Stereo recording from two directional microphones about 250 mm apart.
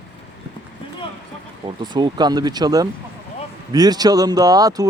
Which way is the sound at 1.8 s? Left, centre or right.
Centre.